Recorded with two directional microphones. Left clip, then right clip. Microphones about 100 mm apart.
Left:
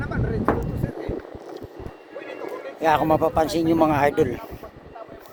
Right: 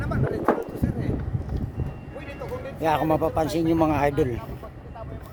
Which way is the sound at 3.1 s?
15° right (ahead or behind).